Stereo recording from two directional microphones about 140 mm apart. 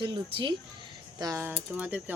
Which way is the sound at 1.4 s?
10° right (ahead or behind).